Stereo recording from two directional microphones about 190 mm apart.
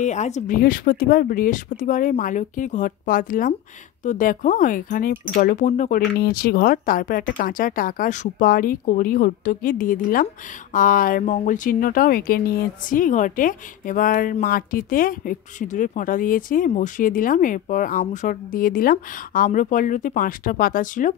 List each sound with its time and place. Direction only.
0.0 s speech: 40° left (ahead or behind)